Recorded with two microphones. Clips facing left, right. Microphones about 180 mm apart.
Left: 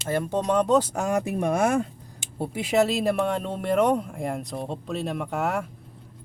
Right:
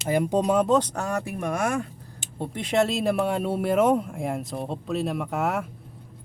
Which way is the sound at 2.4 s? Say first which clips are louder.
Left 1 dB; 5° left (ahead or behind).